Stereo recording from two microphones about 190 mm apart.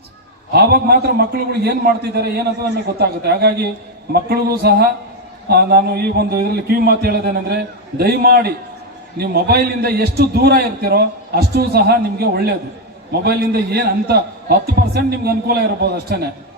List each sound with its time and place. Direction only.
0.5 s a man's voice: 55° right (ahead or behind)